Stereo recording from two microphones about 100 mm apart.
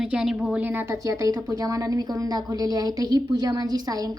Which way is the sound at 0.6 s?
20° right (ahead or behind).